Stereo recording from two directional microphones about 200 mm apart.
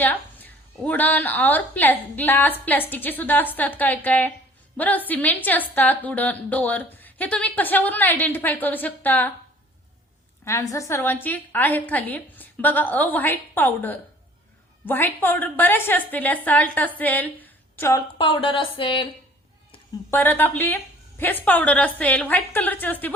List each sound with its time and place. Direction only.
0.0 s a woman's voice: 10° left (ahead or behind)
10.4 s a woman's voice: 15° left (ahead or behind)
18.2 s speech: 25° left (ahead or behind)
20.1 s a woman's voice: 10° left (ahead or behind)